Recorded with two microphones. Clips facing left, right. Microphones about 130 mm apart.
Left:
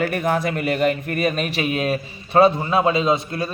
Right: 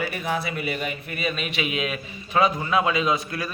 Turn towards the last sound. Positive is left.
turn(degrees=25)  # may be behind; listen again after turning